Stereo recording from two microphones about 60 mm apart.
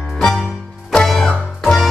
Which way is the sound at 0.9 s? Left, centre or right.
Centre.